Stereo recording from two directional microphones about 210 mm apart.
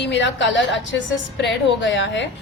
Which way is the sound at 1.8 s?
60° left (ahead or behind).